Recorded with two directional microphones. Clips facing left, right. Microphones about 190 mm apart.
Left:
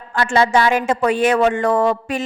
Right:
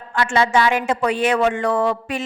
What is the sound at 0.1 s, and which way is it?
Speech, 40° left (ahead or behind).